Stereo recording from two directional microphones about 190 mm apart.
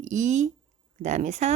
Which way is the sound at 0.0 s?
40° right (ahead or behind).